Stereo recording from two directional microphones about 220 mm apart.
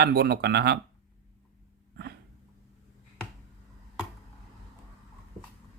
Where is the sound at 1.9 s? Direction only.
50° right (ahead or behind).